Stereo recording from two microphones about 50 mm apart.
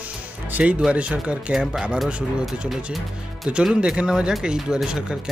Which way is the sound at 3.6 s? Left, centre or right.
Centre.